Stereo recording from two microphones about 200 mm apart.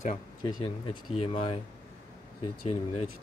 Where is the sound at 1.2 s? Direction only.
30° left (ahead or behind).